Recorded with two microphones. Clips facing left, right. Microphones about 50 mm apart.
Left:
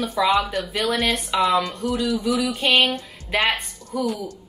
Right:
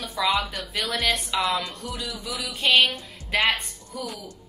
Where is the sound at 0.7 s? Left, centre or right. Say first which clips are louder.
Left 2 dB; left.